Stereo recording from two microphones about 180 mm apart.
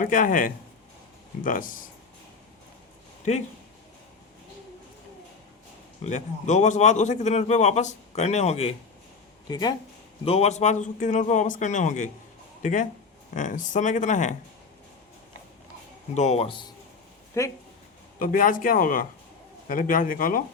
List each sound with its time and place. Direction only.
0.0 s a man's voice: 45° left (ahead or behind)
6.0 s a man's voice: 40° left (ahead or behind)
9.5 s speech: 25° left (ahead or behind)
10.2 s a man's voice: 35° left (ahead or behind)
16.1 s a man's voice: 40° left (ahead or behind)
17.4 s speech: 15° left (ahead or behind)
18.2 s a man's voice: 50° left (ahead or behind)